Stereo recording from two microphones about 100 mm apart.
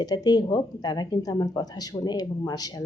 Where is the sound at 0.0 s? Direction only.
45° left (ahead or behind).